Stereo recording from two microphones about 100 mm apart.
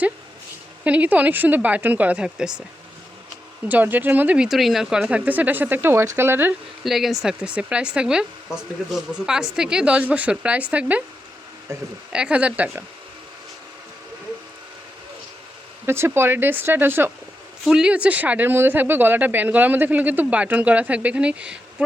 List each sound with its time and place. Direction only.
0.9 s speech: 15° right (ahead or behind)
3.7 s speech: 15° right (ahead or behind)
4.4 s speech: centre (ahead or behind); by 6.5 s 25° right (ahead or behind)
6.8 s speech: centre (ahead or behind)
11.7 s speech: 30° right (ahead or behind)
12.1 s speech: 10° right (ahead or behind)
15.9 s speech: 25° right (ahead or behind)
17.7 s speech: 10° right (ahead or behind)